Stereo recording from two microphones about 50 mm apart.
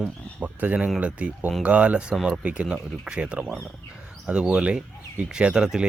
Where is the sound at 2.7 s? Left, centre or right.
Centre.